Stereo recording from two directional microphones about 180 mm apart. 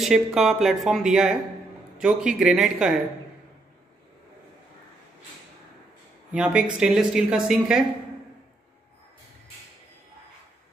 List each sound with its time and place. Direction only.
0.0 s speech: centre (ahead or behind)
6.3 s speech: 5° right (ahead or behind)